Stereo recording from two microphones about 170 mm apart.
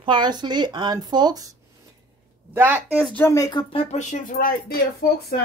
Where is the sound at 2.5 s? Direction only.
10° right (ahead or behind).